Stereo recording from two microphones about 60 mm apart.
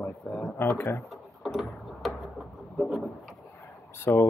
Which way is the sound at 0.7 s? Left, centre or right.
Left.